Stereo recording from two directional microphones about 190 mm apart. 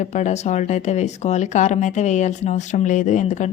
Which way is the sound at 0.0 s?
40° left (ahead or behind).